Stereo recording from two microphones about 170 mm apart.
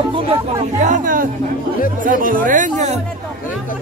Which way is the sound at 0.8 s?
50° right (ahead or behind).